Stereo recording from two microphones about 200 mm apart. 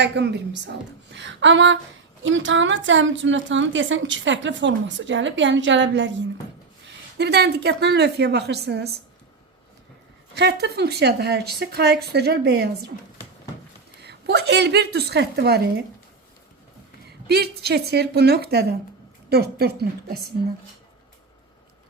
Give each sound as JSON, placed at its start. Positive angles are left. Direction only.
{"t": 0.2, "sound": "a woman's voice", "side_deg": -60}
{"t": 10.3, "sound": "a woman's voice", "side_deg": -55}
{"t": 14.0, "sound": "speech", "side_deg": -55}
{"t": 17.2, "sound": "a woman's voice", "side_deg": -55}